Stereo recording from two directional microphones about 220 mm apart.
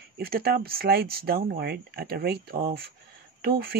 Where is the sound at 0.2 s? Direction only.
45° right (ahead or behind).